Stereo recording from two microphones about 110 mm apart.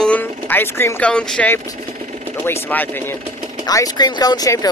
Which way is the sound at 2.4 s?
20° left (ahead or behind).